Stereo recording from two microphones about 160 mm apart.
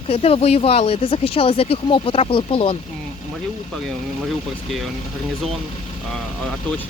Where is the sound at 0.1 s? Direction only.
35° left (ahead or behind).